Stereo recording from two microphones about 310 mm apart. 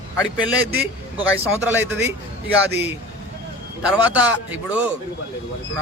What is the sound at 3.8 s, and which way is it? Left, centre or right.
Speech, centre.